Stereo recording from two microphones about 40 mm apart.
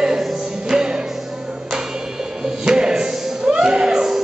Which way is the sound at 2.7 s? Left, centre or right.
Centre.